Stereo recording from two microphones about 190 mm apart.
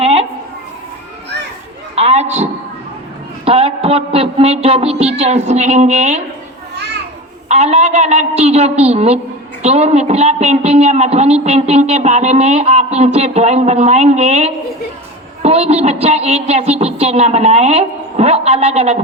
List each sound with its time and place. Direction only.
0.0 s a sound: 30° right (ahead or behind)
2.0 s a woman's voice: 35° right (ahead or behind)
7.4 s a woman's voice: 35° right (ahead or behind)